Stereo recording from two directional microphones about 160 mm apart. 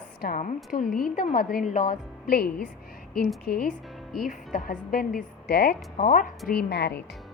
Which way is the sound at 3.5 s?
90° left.